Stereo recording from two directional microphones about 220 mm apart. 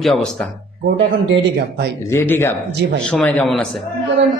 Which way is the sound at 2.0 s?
10° left (ahead or behind).